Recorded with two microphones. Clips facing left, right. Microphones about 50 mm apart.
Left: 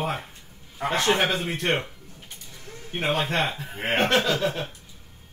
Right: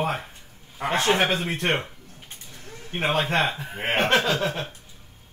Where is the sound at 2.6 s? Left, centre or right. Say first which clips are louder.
Right 2 dB; right.